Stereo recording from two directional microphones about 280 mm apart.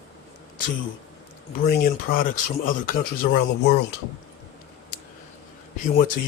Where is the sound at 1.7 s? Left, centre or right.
Left.